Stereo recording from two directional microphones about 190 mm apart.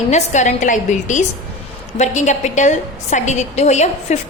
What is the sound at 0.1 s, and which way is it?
A woman's voice, 40° left (ahead or behind).